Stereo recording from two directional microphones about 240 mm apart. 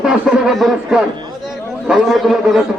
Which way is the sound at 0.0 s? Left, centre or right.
Centre.